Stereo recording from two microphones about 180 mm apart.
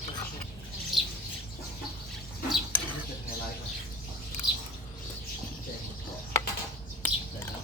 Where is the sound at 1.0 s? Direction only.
Centre (ahead or behind).